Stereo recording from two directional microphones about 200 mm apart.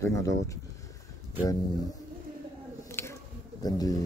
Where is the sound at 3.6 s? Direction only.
20° left (ahead or behind).